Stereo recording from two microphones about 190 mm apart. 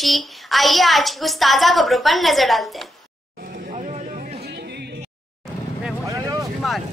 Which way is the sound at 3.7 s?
40° right (ahead or behind).